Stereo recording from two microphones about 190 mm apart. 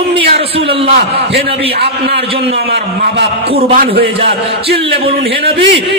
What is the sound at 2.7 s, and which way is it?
A man's voice, 55° right (ahead or behind).